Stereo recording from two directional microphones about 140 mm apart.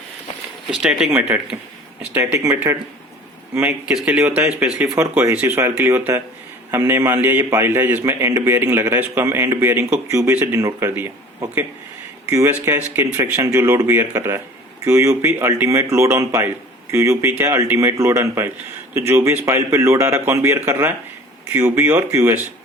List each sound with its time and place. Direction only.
0.7 s a man's voice: 5° right (ahead or behind)
3.8 s a man's voice: 5° right (ahead or behind)
12.3 s a man's voice: 20° right (ahead or behind)